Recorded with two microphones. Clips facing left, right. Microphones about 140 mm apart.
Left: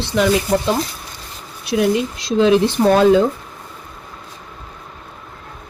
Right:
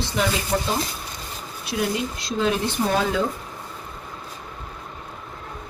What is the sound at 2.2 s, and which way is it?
Speech, 90° left.